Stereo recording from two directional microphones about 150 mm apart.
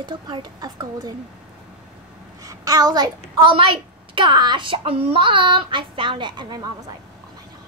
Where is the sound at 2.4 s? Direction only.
25° right (ahead or behind).